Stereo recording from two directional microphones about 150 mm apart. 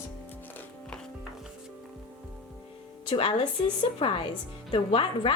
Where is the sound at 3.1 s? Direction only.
35° left (ahead or behind).